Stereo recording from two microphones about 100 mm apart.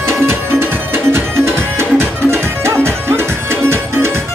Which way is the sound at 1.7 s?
25° right (ahead or behind).